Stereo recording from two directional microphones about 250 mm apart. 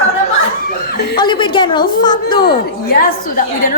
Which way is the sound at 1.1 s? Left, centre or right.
Centre.